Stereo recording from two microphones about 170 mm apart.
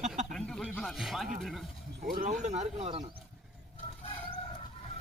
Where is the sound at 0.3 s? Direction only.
5° left (ahead or behind).